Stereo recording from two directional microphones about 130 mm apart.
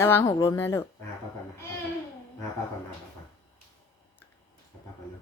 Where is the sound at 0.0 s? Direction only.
20° left (ahead or behind).